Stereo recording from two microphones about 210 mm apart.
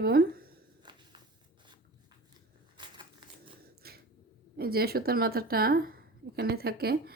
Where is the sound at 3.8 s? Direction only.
50° right (ahead or behind).